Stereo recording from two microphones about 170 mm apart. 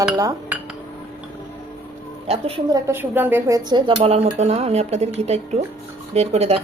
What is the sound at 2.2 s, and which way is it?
Speech, 35° right (ahead or behind).